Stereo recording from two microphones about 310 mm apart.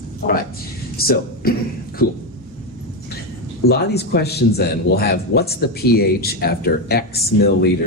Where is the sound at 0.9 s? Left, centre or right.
Left.